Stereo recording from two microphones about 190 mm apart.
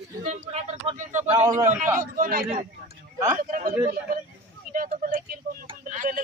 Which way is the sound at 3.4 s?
45° right (ahead or behind).